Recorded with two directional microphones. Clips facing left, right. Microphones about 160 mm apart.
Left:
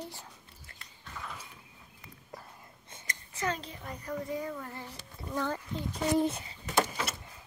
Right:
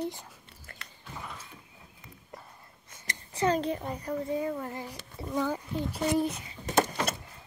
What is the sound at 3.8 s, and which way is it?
Speech, 30° right (ahead or behind).